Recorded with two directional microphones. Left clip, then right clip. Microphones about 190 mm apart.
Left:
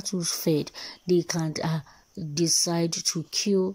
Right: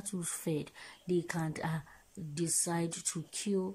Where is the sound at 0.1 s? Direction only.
25° left (ahead or behind).